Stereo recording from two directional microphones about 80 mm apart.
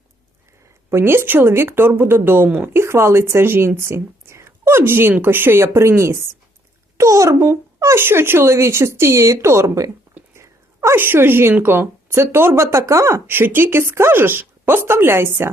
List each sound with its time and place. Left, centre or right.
0.9 s a child's voice: right
13.2 s speech: right